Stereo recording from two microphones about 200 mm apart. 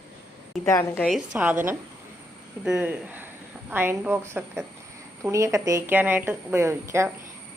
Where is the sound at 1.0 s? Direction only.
5° right (ahead or behind).